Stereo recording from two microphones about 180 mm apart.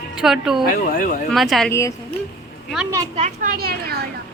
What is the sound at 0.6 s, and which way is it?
Speech, 50° left (ahead or behind).